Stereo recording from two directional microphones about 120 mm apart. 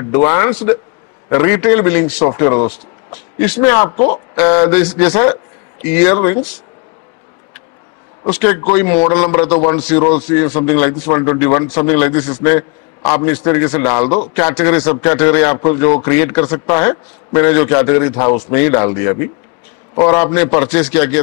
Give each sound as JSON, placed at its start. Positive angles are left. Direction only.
{"t": 0.0, "sound": "a man's voice", "side_deg": 25}
{"t": 8.3, "sound": "a man's voice", "side_deg": 25}